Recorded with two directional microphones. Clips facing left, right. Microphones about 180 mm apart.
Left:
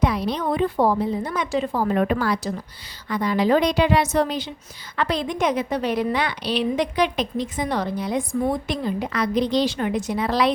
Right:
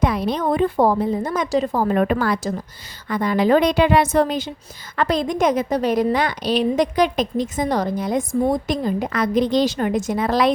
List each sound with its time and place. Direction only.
0.0 s a woman's voice: 50° right (ahead or behind)